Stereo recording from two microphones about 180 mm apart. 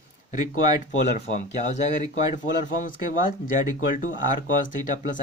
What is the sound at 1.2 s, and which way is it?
Speech, 40° left (ahead or behind).